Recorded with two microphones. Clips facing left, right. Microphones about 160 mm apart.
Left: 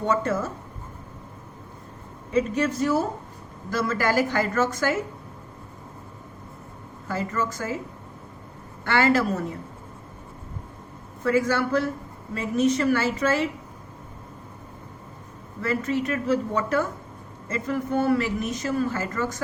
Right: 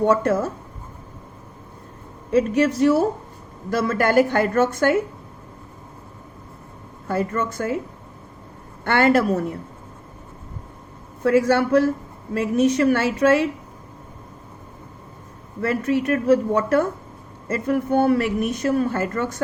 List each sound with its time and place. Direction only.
0.0 s speech: 60° right (ahead or behind)
2.3 s speech: 70° right (ahead or behind)
7.1 s speech: 60° right (ahead or behind)
8.8 s speech: 55° right (ahead or behind)
11.2 s speech: 65° right (ahead or behind)
15.6 s speech: 60° right (ahead or behind)